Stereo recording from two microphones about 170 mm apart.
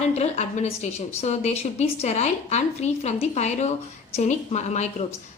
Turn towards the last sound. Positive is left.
turn(degrees=40)  # may be behind; listen again after turning